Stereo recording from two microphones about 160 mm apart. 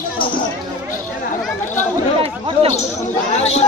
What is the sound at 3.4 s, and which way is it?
Chatter, 40° left (ahead or behind).